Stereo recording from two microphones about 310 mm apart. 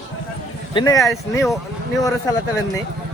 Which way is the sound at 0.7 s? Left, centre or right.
Centre.